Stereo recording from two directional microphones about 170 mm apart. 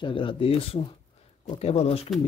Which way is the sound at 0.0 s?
30° left (ahead or behind).